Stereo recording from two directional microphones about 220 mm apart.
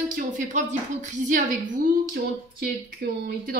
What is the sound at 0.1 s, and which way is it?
Speech, 35° right (ahead or behind).